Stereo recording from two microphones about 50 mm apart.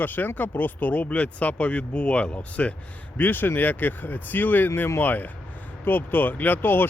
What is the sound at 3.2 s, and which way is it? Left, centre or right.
Speech, left.